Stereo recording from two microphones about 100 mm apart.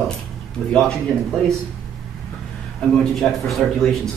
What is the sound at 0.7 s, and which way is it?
Speech, 5° left (ahead or behind).